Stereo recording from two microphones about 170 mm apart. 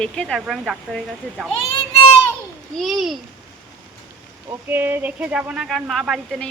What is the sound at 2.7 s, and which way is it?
Speech, centre (ahead or behind).